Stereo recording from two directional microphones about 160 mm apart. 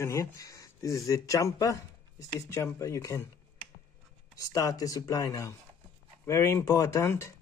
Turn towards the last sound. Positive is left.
turn(degrees=20)  # may be behind; listen again after turning